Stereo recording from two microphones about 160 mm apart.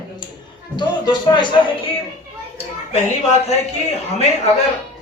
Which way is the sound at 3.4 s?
45° left (ahead or behind).